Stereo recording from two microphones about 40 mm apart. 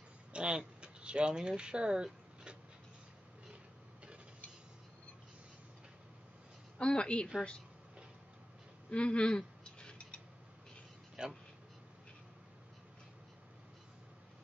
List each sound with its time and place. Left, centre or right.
0.3 s speech: right
6.8 s speech: left
8.9 s speech: left
9.8 s a sound: left
11.2 s speech: right